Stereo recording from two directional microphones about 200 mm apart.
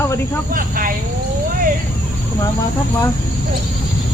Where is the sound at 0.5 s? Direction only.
45° right (ahead or behind).